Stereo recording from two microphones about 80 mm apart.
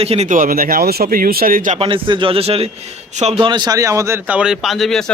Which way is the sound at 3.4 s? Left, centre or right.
Right.